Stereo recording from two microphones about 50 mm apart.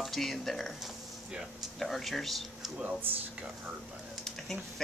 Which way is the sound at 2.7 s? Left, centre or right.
Right.